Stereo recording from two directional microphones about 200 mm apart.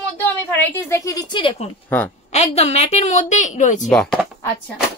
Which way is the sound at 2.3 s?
30° left (ahead or behind).